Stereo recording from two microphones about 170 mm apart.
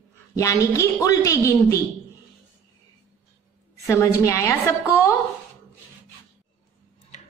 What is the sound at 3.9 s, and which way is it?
A woman's voice, 15° left (ahead or behind).